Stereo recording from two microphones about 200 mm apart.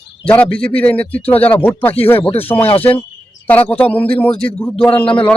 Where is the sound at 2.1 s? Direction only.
30° left (ahead or behind).